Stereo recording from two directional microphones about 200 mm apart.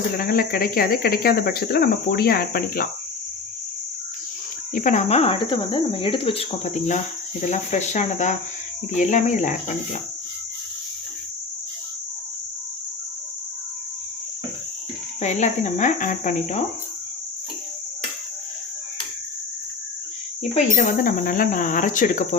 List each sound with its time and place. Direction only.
0.2 s speech: 45° left (ahead or behind)
4.7 s speech: 40° left (ahead or behind)
15.2 s speech: 35° left (ahead or behind)
20.5 s speech: 40° left (ahead or behind)